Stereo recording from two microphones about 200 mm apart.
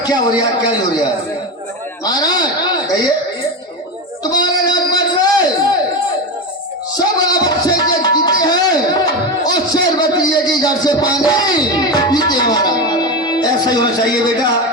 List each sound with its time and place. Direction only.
0.0 s a man's voice: 20° left (ahead or behind)
2.0 s speech: 20° left (ahead or behind)
4.2 s a sound: 20° left (ahead or behind)
6.9 s music: 20° left (ahead or behind)